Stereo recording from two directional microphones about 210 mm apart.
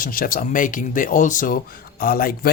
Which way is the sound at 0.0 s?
40° left (ahead or behind).